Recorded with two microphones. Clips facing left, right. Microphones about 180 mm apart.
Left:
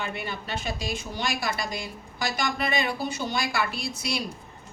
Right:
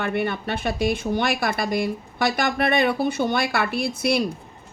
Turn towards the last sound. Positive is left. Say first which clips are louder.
# right 9 dB
turn(degrees=-55)  # may be behind; listen again after turning